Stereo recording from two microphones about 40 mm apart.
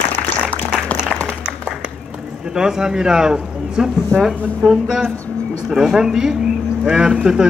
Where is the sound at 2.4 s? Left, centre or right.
Centre.